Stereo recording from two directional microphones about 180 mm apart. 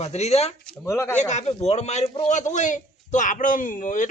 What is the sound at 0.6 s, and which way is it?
Speech, 5° left (ahead or behind).